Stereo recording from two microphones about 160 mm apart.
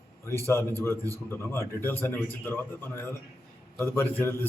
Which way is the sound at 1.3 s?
15° left (ahead or behind).